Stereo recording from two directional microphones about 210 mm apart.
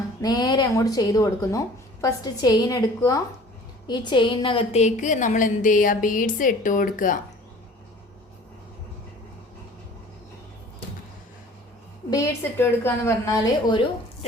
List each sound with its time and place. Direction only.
0.2 s a woman's voice: 20° left (ahead or behind); by 7.2 s 40° left (ahead or behind)
12.1 s speech: 15° left (ahead or behind)